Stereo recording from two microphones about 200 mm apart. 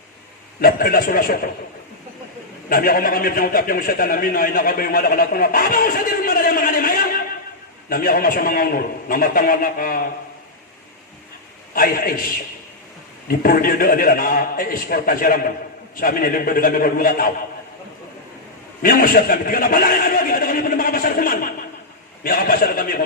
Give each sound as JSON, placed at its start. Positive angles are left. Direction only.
{"t": 0.6, "sound": "a man's voice", "side_deg": 45}
{"t": 2.6, "sound": "a man's voice", "side_deg": 45}
{"t": 11.7, "sound": "a man's voice", "side_deg": 45}
{"t": 13.2, "sound": "a man's voice", "side_deg": 45}
{"t": 18.8, "sound": "chuckle", "side_deg": 45}
{"t": 22.2, "sound": "a man's voice", "side_deg": 45}